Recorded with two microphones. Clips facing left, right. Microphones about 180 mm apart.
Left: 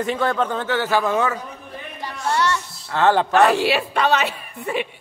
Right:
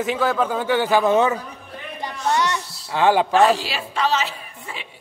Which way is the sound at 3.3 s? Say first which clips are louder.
Left 1 dB; 65° left (ahead or behind).